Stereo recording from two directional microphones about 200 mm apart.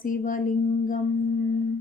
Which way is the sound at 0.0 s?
45° left (ahead or behind).